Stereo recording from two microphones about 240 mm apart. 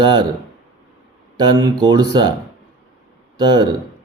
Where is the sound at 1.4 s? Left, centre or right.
Centre.